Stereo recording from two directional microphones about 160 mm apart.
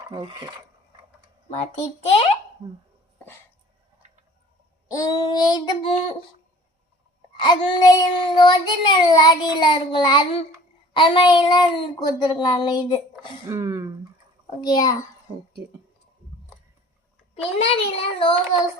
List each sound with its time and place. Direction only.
0.1 s mechanisms: 30° right (ahead or behind)
4.9 s child singing: 20° left (ahead or behind)
7.3 s child singing: 25° left (ahead or behind)
13.5 s speech: 20° right (ahead or behind)
14.6 s child singing: 25° left (ahead or behind)
17.3 s a child's voice: 35° left (ahead or behind)